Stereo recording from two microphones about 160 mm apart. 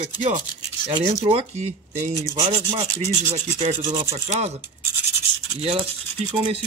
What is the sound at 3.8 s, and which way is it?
Speech, 30° right (ahead or behind).